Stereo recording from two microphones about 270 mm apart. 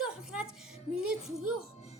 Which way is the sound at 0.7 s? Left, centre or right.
Centre.